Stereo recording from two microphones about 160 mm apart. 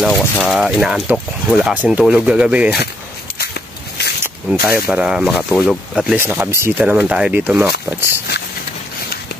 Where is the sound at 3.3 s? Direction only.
90° left.